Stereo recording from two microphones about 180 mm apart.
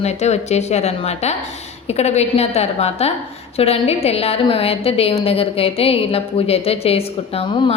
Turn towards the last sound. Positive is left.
turn(degrees=35)  # may be behind; listen again after turning